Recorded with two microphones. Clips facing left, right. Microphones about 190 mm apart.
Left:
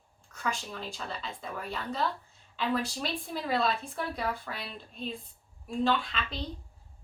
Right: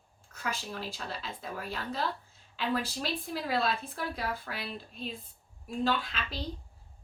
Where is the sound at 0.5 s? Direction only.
5° right (ahead or behind).